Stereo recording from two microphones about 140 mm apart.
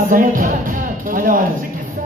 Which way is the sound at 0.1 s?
80° right.